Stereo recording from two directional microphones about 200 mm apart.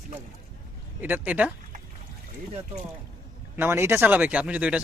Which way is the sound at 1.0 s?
10° right (ahead or behind).